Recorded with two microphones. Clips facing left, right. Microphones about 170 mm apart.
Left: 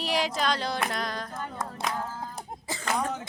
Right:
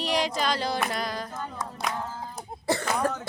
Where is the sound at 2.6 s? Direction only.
70° right (ahead or behind).